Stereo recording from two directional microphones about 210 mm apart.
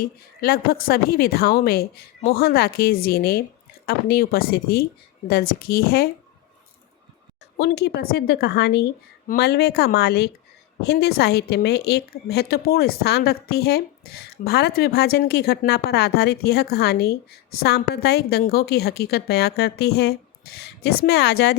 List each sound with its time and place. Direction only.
0.0 s a woman's voice: 45° left (ahead or behind)
7.6 s a woman's voice: 50° left (ahead or behind)